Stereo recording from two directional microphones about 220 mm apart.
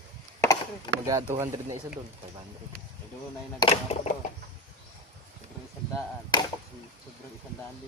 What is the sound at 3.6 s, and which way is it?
Speech, 25° left (ahead or behind).